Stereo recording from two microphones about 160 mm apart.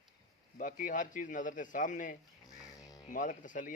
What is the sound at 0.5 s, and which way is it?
Speech, 55° left (ahead or behind).